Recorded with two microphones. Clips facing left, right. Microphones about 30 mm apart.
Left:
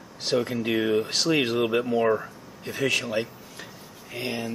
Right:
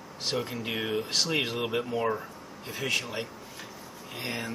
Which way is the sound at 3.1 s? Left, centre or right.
Centre.